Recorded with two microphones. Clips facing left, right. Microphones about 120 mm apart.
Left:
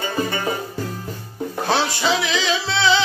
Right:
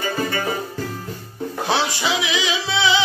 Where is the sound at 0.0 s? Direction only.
25° left (ahead or behind).